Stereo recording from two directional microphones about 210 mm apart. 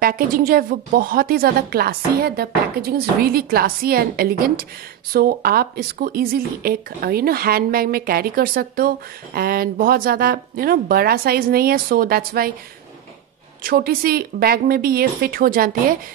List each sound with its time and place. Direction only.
0.0 s speech: 45° right (ahead or behind)
13.6 s speech: 45° right (ahead or behind)